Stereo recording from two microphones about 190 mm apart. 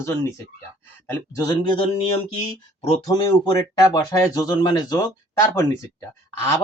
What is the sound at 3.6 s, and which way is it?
Speech, 15° left (ahead or behind).